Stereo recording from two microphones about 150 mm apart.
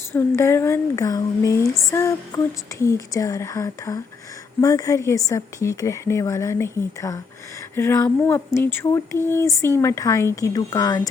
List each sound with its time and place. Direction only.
0.1 s a woman's voice: 15° left (ahead or behind)